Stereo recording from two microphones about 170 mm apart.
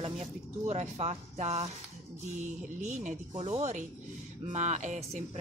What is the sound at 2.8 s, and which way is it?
Speech, 45° right (ahead or behind).